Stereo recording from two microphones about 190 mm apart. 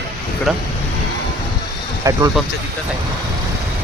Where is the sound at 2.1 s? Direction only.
15° right (ahead or behind).